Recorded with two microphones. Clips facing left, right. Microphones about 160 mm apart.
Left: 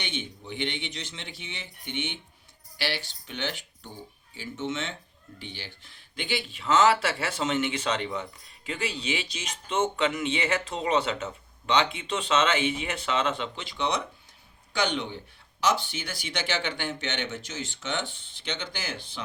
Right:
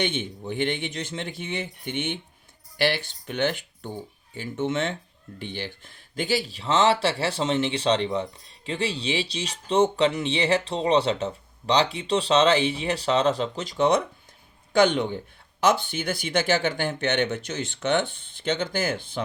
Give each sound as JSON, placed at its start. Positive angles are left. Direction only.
{"t": 0.0, "sound": "speech", "side_deg": -50}